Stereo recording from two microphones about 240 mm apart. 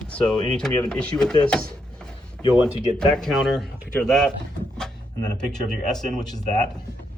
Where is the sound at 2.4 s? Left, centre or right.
Centre.